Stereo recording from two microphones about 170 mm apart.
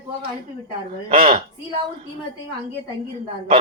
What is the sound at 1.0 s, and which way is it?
Speech, 35° right (ahead or behind).